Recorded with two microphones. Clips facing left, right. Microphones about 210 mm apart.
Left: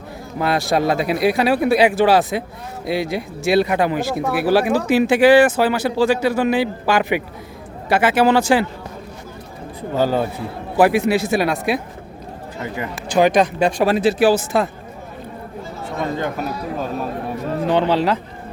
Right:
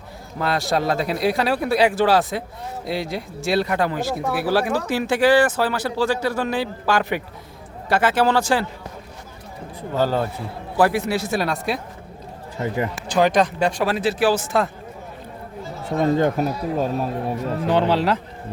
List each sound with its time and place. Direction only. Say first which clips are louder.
0.3 s speech: left 3 dB; 10° left (ahead or behind)
9.9 s speech: left 2 dB; 15° left (ahead or behind)
13.1 s speech: left 3 dB; 15° left (ahead or behind)
16.1 s speech: right 4 dB; 35° right (ahead or behind)
17.7 s speech: left 1 dB; 5° right (ahead or behind)